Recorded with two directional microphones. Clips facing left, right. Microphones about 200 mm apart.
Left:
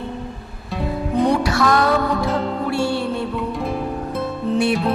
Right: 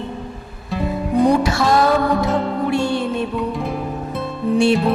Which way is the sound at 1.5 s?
25° right (ahead or behind).